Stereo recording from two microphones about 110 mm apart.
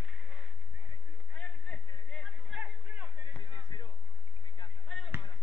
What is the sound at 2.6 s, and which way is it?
Chatter, 15° right (ahead or behind).